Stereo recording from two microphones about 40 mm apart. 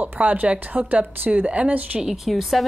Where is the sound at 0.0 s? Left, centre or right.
Right.